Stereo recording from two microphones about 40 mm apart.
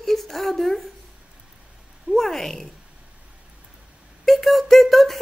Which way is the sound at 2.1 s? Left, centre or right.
Centre.